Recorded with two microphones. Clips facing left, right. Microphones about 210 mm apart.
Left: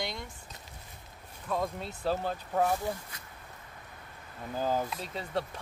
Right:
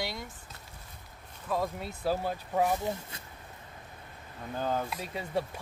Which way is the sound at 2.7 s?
20° right (ahead or behind).